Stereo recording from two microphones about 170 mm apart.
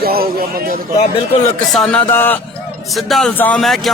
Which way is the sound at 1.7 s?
5° left (ahead or behind).